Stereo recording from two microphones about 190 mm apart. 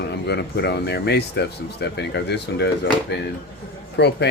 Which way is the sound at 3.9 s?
60° left (ahead or behind).